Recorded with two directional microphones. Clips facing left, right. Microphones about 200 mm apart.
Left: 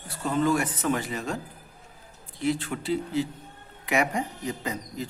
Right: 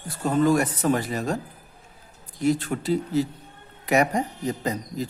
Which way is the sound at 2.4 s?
40° right (ahead or behind).